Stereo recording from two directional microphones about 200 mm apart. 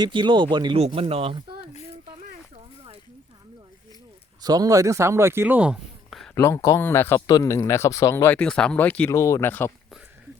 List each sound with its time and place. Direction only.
0.0 s speech: 25° right (ahead or behind)
4.4 s speech: 20° right (ahead or behind); by 6.3 s centre (ahead or behind)
6.3 s speech: 15° left (ahead or behind)